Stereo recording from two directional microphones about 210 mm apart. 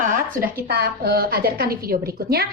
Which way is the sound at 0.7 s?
50° right (ahead or behind).